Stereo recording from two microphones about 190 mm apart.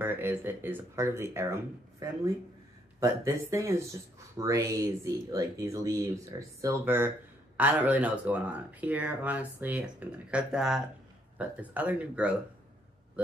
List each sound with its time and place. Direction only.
0.0 s speech: 10° right (ahead or behind)